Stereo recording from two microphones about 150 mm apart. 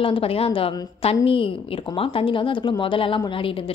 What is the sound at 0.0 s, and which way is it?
A woman's voice, 40° left (ahead or behind).